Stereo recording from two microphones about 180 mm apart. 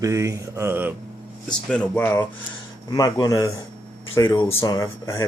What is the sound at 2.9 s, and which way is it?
Speech, 20° left (ahead or behind).